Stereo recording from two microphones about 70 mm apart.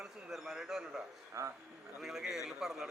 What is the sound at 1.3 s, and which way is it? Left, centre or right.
Speech, right.